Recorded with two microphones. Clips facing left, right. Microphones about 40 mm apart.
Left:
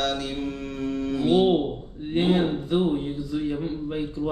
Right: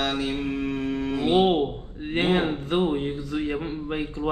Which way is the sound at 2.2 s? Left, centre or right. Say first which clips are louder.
Even; right.